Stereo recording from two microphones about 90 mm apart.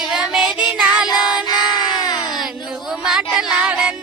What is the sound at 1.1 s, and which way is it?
Music, 50° left (ahead or behind).